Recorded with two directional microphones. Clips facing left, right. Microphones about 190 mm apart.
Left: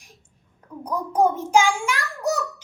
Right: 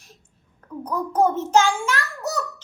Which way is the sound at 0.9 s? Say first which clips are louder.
Even; 10° left (ahead or behind).